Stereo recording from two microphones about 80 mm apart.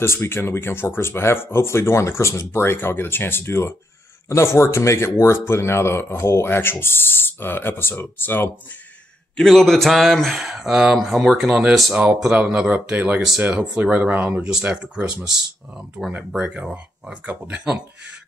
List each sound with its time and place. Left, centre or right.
0.0 s speech: left
9.4 s speech: centre
11.9 s speech: centre
16.3 s speech: centre